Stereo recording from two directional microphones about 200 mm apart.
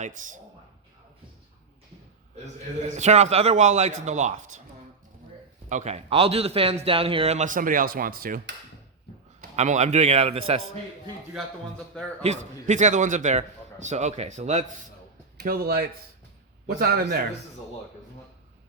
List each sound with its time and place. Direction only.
0.0 s a man's voice: 40° right (ahead or behind)
2.8 s a man's voice: 35° right (ahead or behind)
5.6 s a man's voice: 35° right (ahead or behind)
9.4 s a man's voice: 35° right (ahead or behind)
12.2 s a man's voice: 35° right (ahead or behind)
15.4 s a man's voice: 50° right (ahead or behind)